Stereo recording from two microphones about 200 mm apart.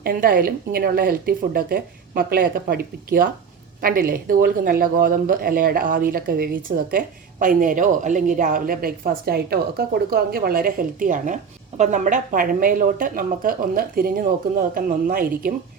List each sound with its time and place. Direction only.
0.0 s speech: 45° right (ahead or behind)